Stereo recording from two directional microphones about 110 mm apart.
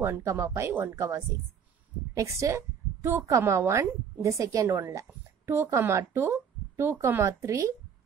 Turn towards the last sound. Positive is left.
turn(degrees=-30)  # may be behind; listen again after turning